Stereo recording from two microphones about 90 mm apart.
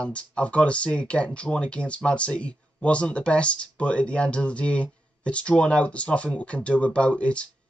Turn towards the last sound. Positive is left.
turn(degrees=15)  # may be behind; listen again after turning